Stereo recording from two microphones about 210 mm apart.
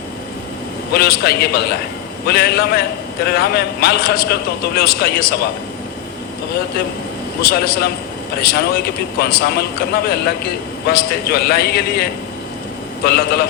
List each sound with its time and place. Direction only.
0.9 s a man's voice: 50° left (ahead or behind)
7.4 s a man's voice: 50° left (ahead or behind)
13.1 s a man's voice: 50° left (ahead or behind)